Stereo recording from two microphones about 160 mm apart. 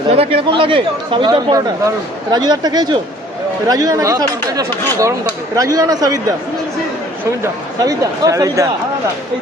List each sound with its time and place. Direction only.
0.1 s speech: 40° right (ahead or behind)
7.4 s speech: 20° right (ahead or behind)